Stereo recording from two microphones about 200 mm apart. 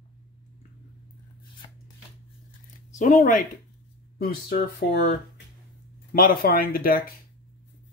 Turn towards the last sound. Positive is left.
turn(degrees=45)  # may be behind; listen again after turning